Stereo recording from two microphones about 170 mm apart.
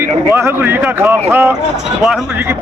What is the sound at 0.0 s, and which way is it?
Speech, 15° right (ahead or behind).